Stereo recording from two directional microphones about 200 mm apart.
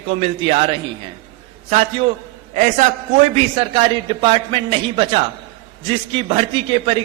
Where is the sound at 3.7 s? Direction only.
25° right (ahead or behind).